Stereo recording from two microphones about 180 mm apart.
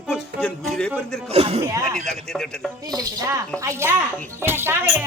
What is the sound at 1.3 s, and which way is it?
Speech, 35° right (ahead or behind).